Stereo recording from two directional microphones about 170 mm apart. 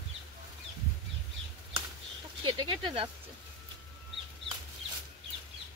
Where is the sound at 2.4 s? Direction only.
30° right (ahead or behind).